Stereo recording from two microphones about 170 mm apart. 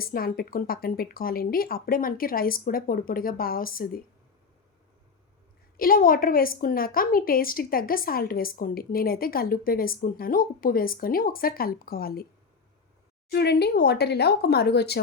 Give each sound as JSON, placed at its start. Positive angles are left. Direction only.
{"t": 0.0, "sound": "a woman's voice", "side_deg": 60}
{"t": 5.7, "sound": "a woman's voice", "side_deg": 55}
{"t": 13.3, "sound": "speech", "side_deg": 75}